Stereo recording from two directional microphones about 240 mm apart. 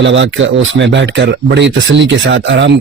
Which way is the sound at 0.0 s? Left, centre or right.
Right.